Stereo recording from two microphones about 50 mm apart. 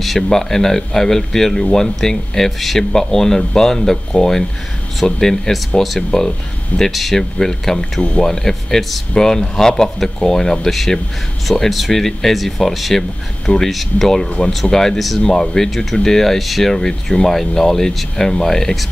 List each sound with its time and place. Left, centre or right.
0.0 s speech: centre
7.2 s speech: centre
8.0 s speech: left
8.3 s speech: centre
11.7 s speech: centre
16.7 s speech: centre